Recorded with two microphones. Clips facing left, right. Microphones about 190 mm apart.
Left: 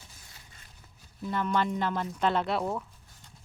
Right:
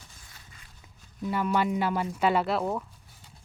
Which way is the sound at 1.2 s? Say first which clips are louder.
Right 2 dB; 10° right (ahead or behind).